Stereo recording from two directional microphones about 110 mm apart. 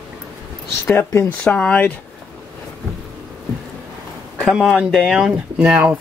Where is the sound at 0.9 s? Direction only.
25° left (ahead or behind).